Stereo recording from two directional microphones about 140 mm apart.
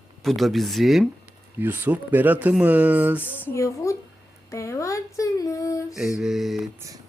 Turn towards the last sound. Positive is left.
turn(degrees=-25)  # may be behind; listen again after turning